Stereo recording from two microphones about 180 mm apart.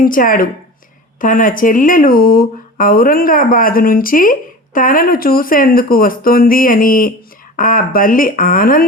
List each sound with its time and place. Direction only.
0.0 s speech: 50° left (ahead or behind)